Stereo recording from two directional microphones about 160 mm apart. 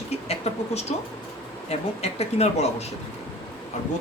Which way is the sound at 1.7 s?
40° left (ahead or behind).